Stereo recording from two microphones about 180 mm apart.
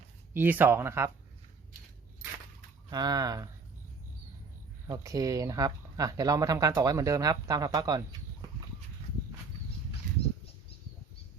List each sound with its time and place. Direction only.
0.3 s speech: 10° right (ahead or behind)
2.9 s speech: 20° right (ahead or behind)
4.9 s speech: 20° right (ahead or behind)